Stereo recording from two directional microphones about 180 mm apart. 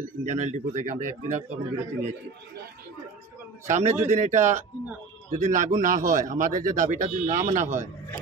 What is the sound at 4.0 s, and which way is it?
Speech, 40° right (ahead or behind).